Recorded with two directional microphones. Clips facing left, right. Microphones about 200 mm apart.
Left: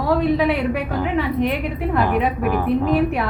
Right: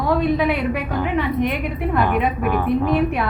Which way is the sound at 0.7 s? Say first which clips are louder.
Even; 35° left (ahead or behind).